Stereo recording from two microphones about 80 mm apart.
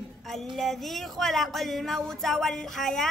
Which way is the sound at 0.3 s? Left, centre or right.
Centre.